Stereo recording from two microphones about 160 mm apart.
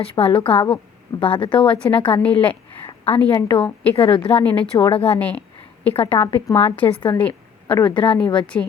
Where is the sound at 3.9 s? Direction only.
35° left (ahead or behind).